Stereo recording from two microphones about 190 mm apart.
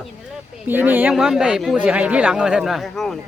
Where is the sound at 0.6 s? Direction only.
10° right (ahead or behind).